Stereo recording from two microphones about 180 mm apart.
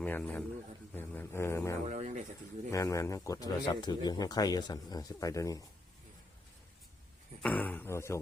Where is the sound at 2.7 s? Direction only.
15° left (ahead or behind).